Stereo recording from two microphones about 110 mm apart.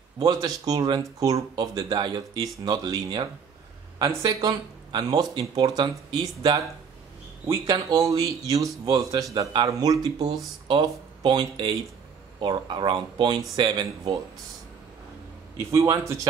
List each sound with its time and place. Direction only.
0.2 s speech: 35° right (ahead or behind)
7.6 s speech: 35° right (ahead or behind)
15.7 s a man's voice: 30° right (ahead or behind)